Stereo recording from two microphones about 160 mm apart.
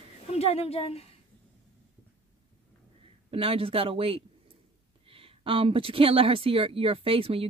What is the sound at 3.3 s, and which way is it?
Speech, 35° right (ahead or behind).